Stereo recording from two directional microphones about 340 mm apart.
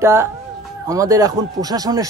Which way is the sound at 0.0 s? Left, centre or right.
Centre.